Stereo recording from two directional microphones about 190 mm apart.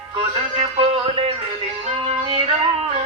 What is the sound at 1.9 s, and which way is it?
Yodeling, 30° right (ahead or behind).